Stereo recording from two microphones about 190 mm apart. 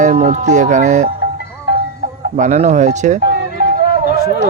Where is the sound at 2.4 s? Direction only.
35° right (ahead or behind).